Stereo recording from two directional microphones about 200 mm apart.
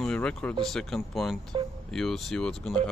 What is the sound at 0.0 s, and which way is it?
Speech, 5° left (ahead or behind).